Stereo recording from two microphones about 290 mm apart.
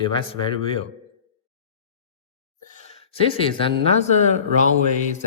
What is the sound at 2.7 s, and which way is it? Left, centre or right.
Speech, left.